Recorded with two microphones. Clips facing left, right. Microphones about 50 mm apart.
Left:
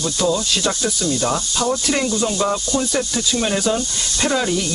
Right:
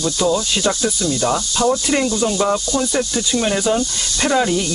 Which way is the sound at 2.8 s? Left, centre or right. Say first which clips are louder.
Right 2 dB; centre.